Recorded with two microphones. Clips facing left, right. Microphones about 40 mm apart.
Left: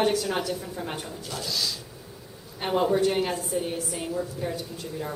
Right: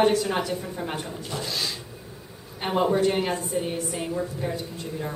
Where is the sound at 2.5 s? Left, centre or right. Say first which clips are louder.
Right 1 dB; centre.